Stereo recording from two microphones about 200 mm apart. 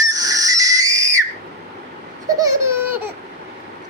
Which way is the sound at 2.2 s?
15° right (ahead or behind).